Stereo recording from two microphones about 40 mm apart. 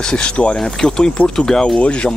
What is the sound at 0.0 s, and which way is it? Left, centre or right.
Speech, left.